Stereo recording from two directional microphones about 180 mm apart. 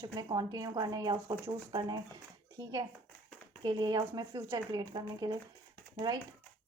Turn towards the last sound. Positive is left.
turn(degrees=-25)  # may be behind; listen again after turning